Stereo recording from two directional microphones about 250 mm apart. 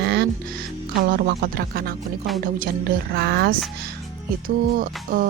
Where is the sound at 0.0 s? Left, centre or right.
Right.